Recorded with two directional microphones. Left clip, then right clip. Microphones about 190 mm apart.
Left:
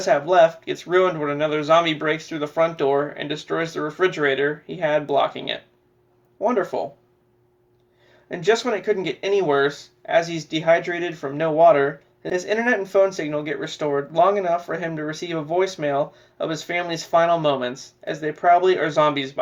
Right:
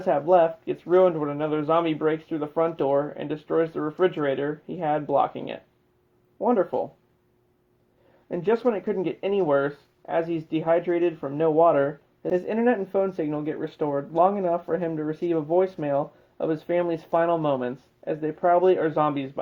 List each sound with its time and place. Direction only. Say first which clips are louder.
0.3 s speech: left 4 dB; 40° right (ahead or behind)
8.3 s speech: left 3 dB; 40° right (ahead or behind)